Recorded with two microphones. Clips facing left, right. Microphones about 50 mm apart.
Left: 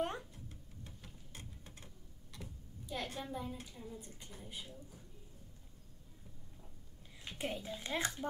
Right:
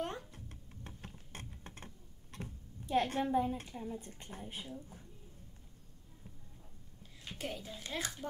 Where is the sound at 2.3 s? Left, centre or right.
Right.